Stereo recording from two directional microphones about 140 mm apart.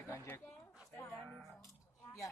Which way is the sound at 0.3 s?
15° left (ahead or behind).